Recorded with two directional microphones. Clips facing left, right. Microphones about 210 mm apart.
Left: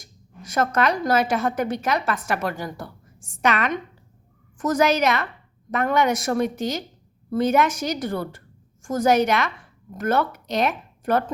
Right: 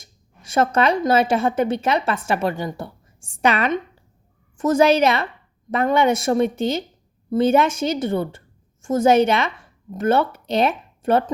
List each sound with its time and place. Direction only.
0.0 s speech: 30° right (ahead or behind)